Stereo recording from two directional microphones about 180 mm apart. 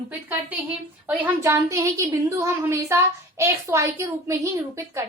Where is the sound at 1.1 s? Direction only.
15° right (ahead or behind).